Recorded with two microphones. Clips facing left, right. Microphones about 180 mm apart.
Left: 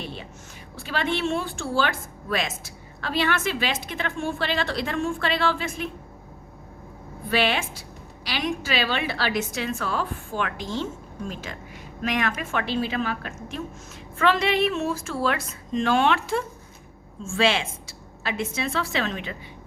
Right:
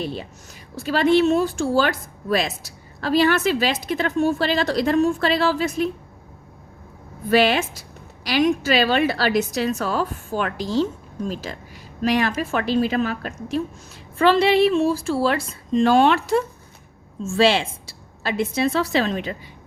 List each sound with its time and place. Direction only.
0.0 s a woman's voice: 40° right (ahead or behind)
7.3 s a woman's voice: 40° right (ahead or behind)